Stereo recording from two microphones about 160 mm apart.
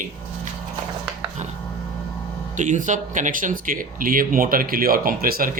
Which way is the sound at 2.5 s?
50° right (ahead or behind).